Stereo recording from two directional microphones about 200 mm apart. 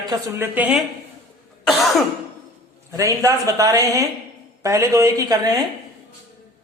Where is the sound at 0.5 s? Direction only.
5° right (ahead or behind).